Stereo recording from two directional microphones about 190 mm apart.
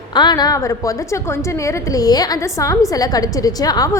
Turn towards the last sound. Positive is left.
turn(degrees=20)  # may be behind; listen again after turning